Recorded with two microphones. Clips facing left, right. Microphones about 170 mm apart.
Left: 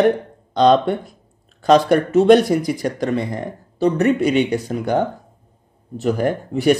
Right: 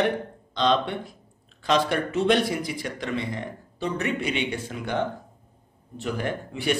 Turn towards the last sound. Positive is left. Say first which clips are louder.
# left 10 dB
turn(degrees=40)  # may be behind; listen again after turning